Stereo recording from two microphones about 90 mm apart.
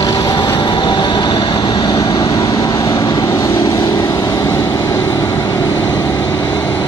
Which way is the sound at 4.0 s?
30° left (ahead or behind).